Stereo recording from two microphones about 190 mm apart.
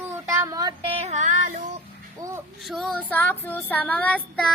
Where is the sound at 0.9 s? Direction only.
35° right (ahead or behind).